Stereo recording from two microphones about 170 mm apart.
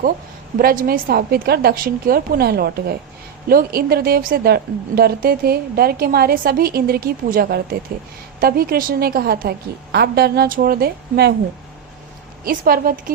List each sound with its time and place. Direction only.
0.6 s a woman's voice: 60° right (ahead or behind)
12.5 s a woman's voice: 60° right (ahead or behind)